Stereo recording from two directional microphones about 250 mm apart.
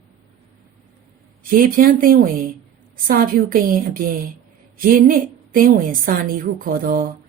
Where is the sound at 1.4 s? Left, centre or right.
Right.